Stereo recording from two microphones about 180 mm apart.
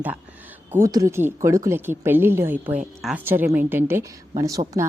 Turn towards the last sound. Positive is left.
turn(degrees=-15)  # may be behind; listen again after turning